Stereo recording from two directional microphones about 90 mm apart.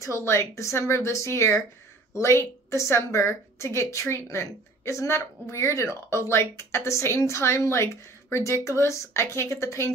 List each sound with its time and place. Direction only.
0.0 s a woman's voice: 30° left (ahead or behind)